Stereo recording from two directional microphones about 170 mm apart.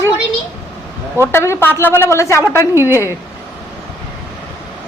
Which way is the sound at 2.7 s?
15° right (ahead or behind).